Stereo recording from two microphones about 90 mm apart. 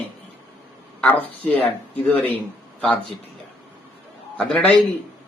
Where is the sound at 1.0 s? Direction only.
20° left (ahead or behind).